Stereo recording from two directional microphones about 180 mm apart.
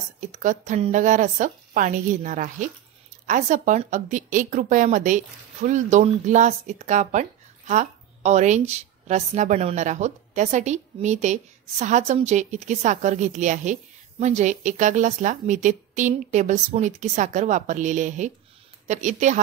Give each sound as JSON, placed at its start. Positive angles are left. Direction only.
{"t": 0.3, "sound": "a woman's voice", "side_deg": -45}